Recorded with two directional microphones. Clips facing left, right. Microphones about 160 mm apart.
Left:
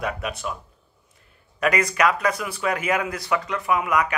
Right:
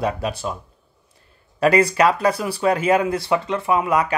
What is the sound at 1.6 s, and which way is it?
Speech, 30° right (ahead or behind).